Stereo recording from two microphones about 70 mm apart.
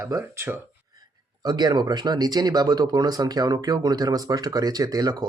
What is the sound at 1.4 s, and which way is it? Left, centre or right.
Speech, right.